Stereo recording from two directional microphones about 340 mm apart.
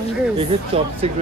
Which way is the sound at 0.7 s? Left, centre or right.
Centre.